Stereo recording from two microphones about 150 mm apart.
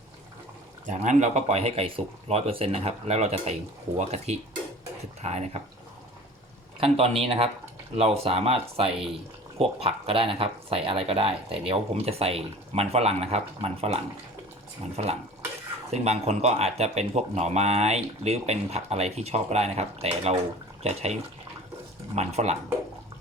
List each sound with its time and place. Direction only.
0.9 s speech: 55° right (ahead or behind)
6.7 s speech: 40° right (ahead or behind)
15.9 s speech: 45° right (ahead or behind)